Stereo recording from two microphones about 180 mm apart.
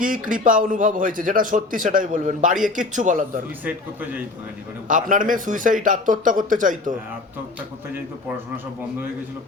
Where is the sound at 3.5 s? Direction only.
10° right (ahead or behind).